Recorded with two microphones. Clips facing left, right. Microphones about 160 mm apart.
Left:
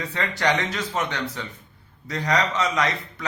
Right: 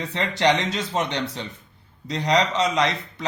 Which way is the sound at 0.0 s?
25° right (ahead or behind).